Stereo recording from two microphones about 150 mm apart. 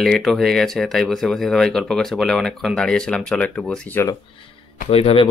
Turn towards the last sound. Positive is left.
turn(degrees=40)  # may be behind; listen again after turning